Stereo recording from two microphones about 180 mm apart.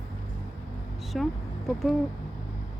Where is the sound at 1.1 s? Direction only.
Centre (ahead or behind).